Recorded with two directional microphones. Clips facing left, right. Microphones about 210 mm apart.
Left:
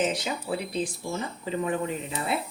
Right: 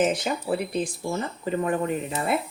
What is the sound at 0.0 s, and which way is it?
A woman's voice, 50° right (ahead or behind).